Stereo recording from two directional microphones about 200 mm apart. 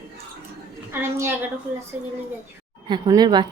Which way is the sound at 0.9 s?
10° right (ahead or behind).